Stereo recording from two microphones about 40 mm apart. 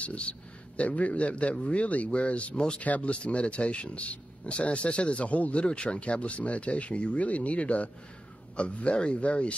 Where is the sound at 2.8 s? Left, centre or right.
Left.